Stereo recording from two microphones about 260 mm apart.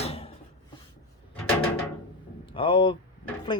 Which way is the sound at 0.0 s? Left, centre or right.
Left.